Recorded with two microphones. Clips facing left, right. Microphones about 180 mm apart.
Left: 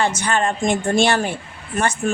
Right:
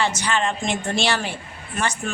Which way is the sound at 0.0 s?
50° left (ahead or behind).